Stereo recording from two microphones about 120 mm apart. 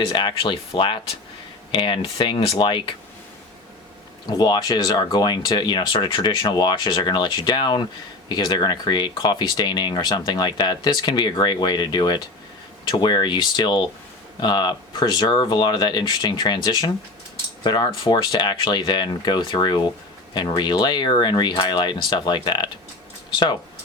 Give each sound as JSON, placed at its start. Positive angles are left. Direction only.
{"t": 0.0, "sound": "speech", "side_deg": 40}
{"t": 4.3, "sound": "speech", "side_deg": 35}